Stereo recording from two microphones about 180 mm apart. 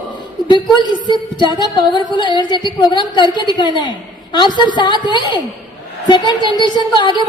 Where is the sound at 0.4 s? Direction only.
25° left (ahead or behind).